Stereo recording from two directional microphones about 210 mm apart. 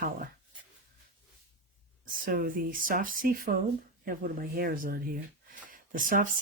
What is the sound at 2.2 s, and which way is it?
Speech, 40° right (ahead or behind).